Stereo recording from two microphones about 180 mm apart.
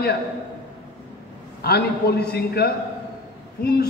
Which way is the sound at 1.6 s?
60° left (ahead or behind).